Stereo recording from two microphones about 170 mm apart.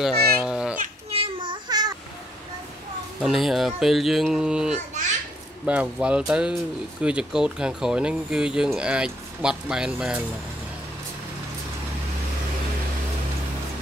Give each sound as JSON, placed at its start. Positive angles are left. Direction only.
{"t": 0.0, "sound": "babbling", "side_deg": -5}
{"t": 1.1, "sound": "child singing", "side_deg": -30}
{"t": 3.2, "sound": "speech", "side_deg": 0}